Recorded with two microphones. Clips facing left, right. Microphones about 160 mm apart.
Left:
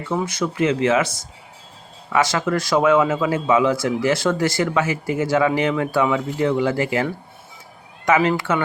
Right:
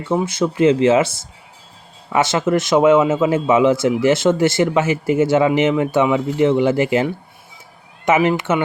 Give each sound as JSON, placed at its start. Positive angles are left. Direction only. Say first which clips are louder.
{"t": 0.0, "sound": "speech", "louder": "right 4 dB", "side_deg": -25}